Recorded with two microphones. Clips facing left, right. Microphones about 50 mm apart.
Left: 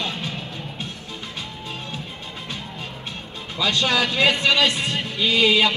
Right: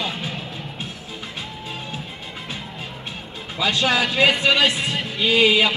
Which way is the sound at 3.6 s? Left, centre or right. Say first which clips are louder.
Right 1 dB; centre.